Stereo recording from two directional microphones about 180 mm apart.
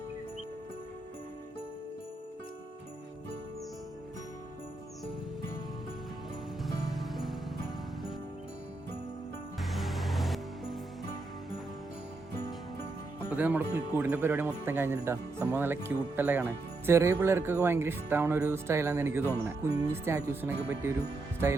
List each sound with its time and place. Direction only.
6.6 s music: centre (ahead or behind)
9.6 s music: centre (ahead or behind)
13.3 s speech: 10° right (ahead or behind)
19.6 s music: 20° right (ahead or behind)
20.1 s speech: 15° right (ahead or behind)